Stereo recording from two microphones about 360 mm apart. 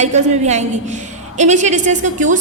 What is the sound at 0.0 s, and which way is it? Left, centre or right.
A woman's voice, centre.